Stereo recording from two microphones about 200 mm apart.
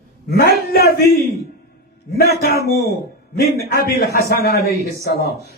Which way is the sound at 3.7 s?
50° left (ahead or behind).